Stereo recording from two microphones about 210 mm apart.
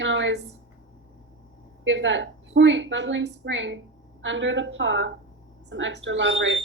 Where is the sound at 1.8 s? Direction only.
60° right (ahead or behind).